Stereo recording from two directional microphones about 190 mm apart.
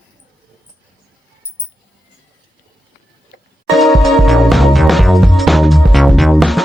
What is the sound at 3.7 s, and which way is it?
Music, centre (ahead or behind).